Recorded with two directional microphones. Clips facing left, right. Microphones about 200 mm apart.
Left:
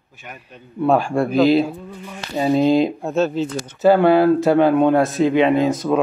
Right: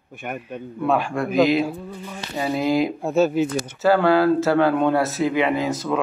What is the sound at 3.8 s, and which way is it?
Speech, 20° left (ahead or behind).